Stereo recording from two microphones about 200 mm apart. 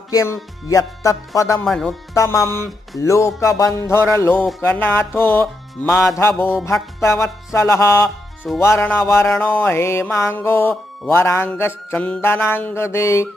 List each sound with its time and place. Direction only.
0.1 s mantra: 15° left (ahead or behind)
1.6 s speech: centre (ahead or behind)
2.1 s mantra: 15° left (ahead or behind)